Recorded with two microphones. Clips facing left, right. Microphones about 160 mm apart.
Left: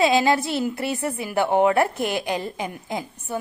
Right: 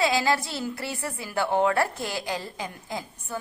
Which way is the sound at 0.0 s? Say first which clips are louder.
Left 5 dB; 20° left (ahead or behind).